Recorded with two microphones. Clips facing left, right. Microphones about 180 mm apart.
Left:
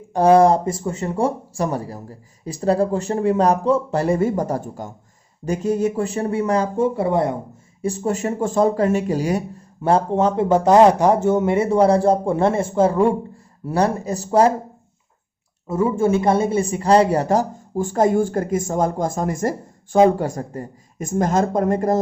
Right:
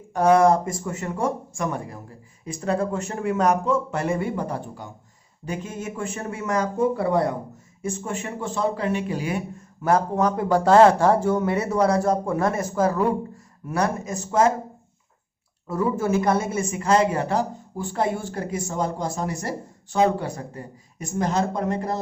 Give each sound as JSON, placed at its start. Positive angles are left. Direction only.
{"t": 0.1, "sound": "speech", "side_deg": 30}
{"t": 7.8, "sound": "speech", "side_deg": 35}
{"t": 15.6, "sound": "speech", "side_deg": 25}